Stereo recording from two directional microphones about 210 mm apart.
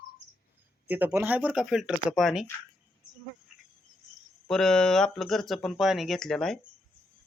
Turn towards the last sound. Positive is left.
turn(degrees=0)  # may be behind; listen again after turning